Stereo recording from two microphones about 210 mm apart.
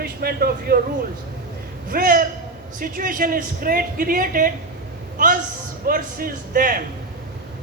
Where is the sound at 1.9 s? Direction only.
45° right (ahead or behind).